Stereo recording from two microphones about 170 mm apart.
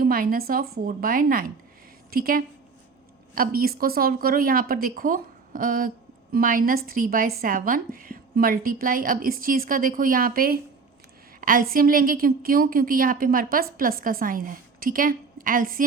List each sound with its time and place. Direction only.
0.0 s a woman's voice: 60° right (ahead or behind)